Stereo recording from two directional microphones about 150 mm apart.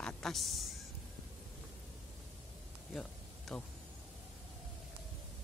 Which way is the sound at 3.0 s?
Centre (ahead or behind).